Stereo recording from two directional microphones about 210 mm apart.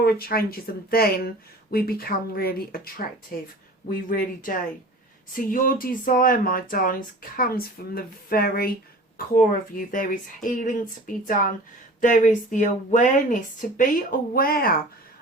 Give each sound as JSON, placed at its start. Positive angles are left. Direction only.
{"t": 0.0, "sound": "a woman's voice", "side_deg": 45}